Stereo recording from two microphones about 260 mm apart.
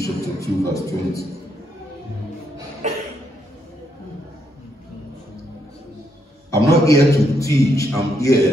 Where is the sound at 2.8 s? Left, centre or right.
Right.